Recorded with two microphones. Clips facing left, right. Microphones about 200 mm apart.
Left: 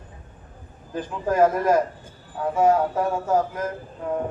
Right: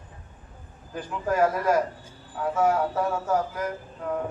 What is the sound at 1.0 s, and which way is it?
A man's voice, 20° left (ahead or behind).